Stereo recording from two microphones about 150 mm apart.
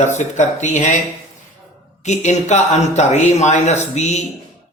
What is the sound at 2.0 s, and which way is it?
Speech, 50° left (ahead or behind).